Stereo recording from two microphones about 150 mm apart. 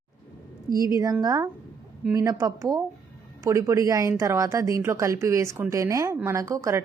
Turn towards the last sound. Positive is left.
turn(degrees=-20)  # may be behind; listen again after turning